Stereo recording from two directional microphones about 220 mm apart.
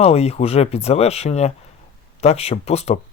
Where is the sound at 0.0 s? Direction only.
30° left (ahead or behind).